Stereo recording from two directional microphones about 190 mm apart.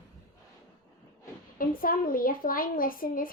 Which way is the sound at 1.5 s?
50° left (ahead or behind).